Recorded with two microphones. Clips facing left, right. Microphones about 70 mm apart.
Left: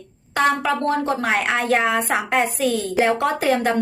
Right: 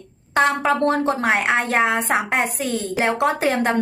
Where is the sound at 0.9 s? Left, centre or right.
Right.